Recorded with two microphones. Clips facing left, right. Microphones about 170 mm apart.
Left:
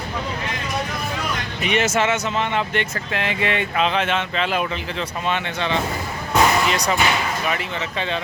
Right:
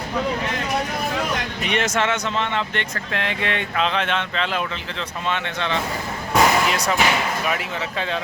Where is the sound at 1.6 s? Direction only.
5° left (ahead or behind).